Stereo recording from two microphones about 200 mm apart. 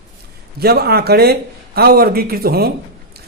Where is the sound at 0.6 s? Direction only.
50° right (ahead or behind).